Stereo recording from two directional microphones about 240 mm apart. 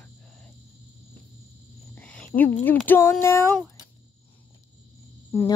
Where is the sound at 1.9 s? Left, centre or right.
Centre.